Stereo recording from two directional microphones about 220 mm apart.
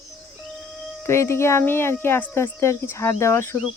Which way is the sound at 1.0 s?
10° left (ahead or behind).